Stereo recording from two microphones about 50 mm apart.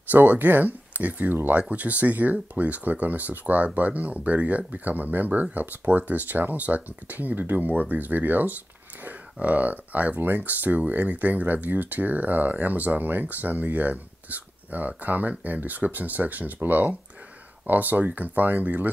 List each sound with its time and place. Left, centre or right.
0.1 s speech: right